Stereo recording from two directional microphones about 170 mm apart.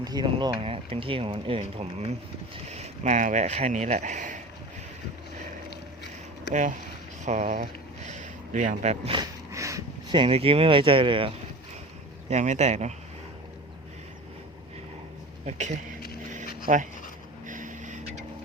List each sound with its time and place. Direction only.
0.0 s speech: 25° right (ahead or behind); by 4.4 s 45° right (ahead or behind)
6.5 s speech: 50° right (ahead or behind)
9.1 s a sound: 15° right (ahead or behind)
10.1 s speech: 30° right (ahead or behind)
12.3 s speech: 40° right (ahead or behind)
15.4 s speech: 45° right (ahead or behind)
17.4 s vehicle: 50° right (ahead or behind)